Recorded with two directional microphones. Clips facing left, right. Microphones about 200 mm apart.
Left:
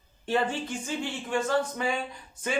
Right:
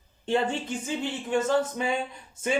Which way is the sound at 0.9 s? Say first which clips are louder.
Right 4 dB; 20° right (ahead or behind).